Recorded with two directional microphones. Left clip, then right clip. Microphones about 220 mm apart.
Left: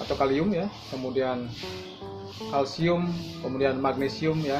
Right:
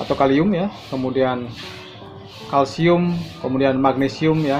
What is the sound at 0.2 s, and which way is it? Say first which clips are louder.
Speech: right 8 dB; 30° right (ahead or behind).